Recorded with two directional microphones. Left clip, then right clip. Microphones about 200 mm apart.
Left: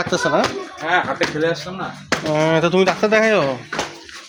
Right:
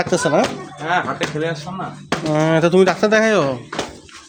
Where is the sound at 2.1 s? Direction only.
25° right (ahead or behind).